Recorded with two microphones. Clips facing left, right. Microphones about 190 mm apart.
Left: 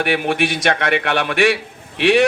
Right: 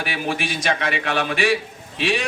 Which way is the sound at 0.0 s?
65° left (ahead or behind).